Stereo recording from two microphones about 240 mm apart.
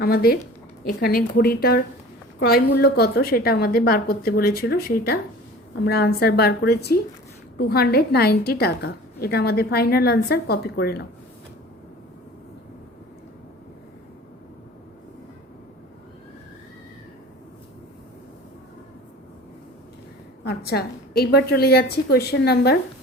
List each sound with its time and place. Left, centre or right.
0.0 s a woman's voice: left
20.4 s a woman's voice: left